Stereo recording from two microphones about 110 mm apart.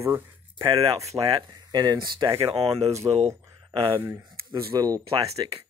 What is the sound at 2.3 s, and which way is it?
Speech, 70° right (ahead or behind).